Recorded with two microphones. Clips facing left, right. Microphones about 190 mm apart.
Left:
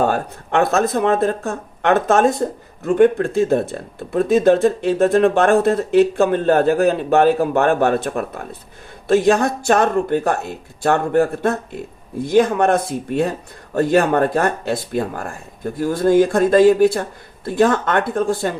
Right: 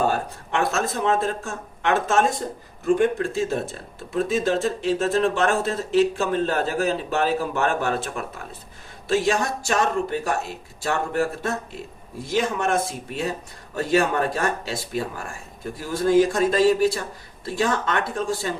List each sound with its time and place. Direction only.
0.0 s speech: 60° left (ahead or behind)
13.7 s speech: 60° left (ahead or behind)